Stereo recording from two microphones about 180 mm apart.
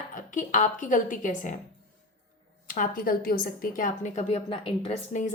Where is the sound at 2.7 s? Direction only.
50° left (ahead or behind).